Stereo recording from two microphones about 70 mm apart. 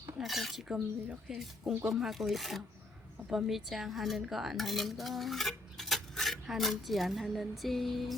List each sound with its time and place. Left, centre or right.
0.2 s a woman's voice: centre
4.2 s cutlery: centre